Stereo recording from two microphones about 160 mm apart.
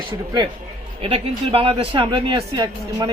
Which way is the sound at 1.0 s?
35° right (ahead or behind).